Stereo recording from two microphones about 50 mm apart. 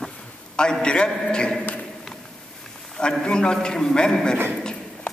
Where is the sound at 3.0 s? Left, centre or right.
Centre.